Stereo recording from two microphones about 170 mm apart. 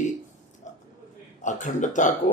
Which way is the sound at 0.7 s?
45° left (ahead or behind).